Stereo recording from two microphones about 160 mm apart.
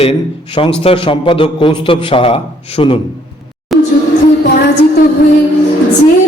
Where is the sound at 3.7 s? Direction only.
Centre (ahead or behind).